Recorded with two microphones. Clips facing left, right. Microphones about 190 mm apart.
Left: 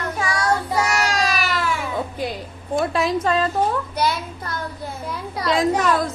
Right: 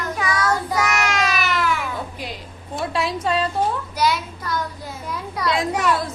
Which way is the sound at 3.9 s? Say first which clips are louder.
Right 1 dB; 55° left (ahead or behind).